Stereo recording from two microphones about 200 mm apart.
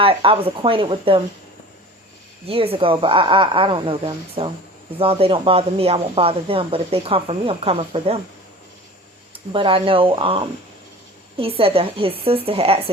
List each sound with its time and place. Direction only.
0.0 s speech: 25° right (ahead or behind)
2.5 s speech: 30° right (ahead or behind)
9.3 s speech: 25° right (ahead or behind)